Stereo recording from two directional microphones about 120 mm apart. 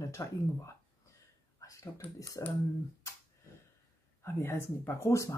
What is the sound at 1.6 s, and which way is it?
Whispering, 25° left (ahead or behind).